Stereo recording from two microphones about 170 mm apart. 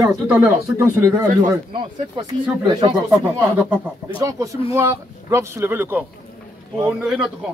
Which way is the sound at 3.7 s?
15° right (ahead or behind).